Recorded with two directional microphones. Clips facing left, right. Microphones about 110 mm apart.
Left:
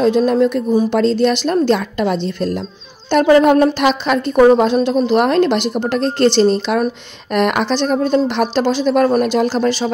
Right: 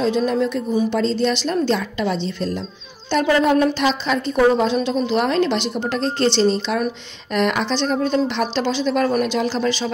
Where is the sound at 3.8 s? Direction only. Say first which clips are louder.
Left 5 dB; 60° left (ahead or behind).